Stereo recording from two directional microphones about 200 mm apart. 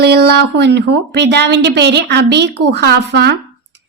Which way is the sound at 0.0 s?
55° right (ahead or behind).